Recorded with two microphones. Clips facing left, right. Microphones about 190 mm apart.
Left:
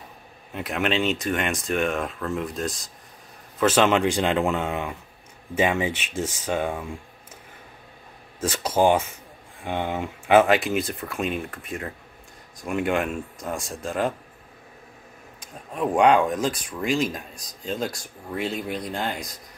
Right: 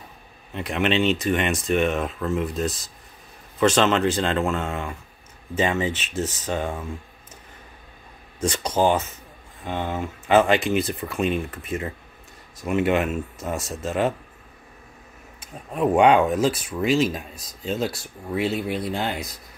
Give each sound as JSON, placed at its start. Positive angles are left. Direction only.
{"t": 0.5, "sound": "speech", "side_deg": 5}
{"t": 8.4, "sound": "speech", "side_deg": 5}
{"t": 15.4, "sound": "speech", "side_deg": -5}